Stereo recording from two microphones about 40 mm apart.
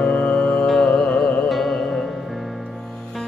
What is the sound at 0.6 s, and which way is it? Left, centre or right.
Music, centre.